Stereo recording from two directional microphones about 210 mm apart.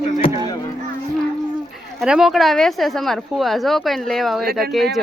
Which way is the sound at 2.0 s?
5° right (ahead or behind).